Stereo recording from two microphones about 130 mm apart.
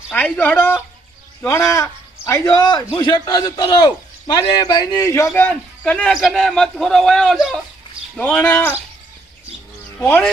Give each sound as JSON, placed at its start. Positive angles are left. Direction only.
{"t": 0.1, "sound": "a man's voice", "side_deg": 10}
{"t": 8.1, "sound": "speech", "side_deg": 10}
{"t": 10.0, "sound": "speech", "side_deg": 15}